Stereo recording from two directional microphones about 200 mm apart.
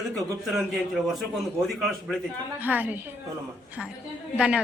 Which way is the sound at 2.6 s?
10° right (ahead or behind).